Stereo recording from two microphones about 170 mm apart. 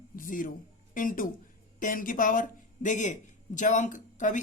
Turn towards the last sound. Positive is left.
turn(degrees=50)  # may be behind; listen again after turning